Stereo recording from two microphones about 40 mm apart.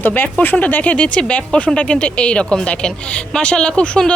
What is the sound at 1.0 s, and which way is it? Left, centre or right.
A woman's voice, left.